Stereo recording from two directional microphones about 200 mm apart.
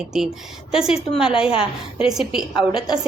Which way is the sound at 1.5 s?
25° left (ahead or behind).